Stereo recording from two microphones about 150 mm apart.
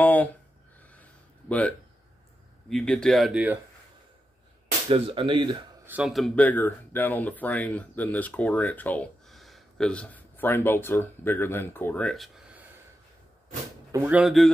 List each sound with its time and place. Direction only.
0.0 s a sound: 10° left (ahead or behind)
1.5 s speech: 10° left (ahead or behind)
4.8 s speech: 35° right (ahead or behind)
5.9 s speech: 5° right (ahead or behind)
13.9 s speech: 10° right (ahead or behind)
14.2 s speech: centre (ahead or behind)